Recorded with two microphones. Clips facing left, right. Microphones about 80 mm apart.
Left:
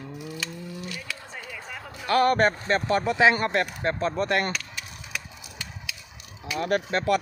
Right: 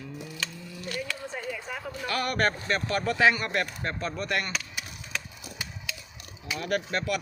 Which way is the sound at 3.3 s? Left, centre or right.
Left.